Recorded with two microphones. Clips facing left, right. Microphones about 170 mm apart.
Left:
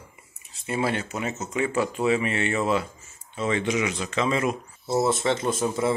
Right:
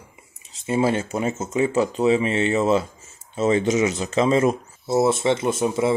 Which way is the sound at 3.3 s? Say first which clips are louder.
Right 6 dB; 35° right (ahead or behind).